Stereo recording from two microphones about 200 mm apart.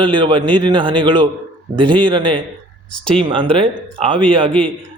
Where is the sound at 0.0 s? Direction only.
25° right (ahead or behind).